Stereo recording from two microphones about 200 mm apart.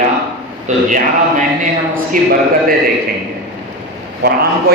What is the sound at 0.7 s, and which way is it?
A man's voice, 35° right (ahead or behind).